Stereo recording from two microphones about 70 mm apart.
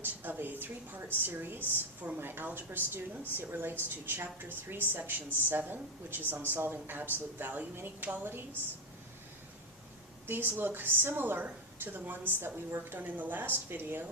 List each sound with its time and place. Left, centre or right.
0.0 s a woman's voice: right
10.2 s a woman's voice: right